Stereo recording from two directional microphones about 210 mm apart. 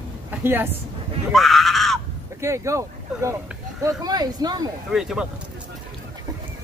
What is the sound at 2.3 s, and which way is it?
Speech, 15° right (ahead or behind).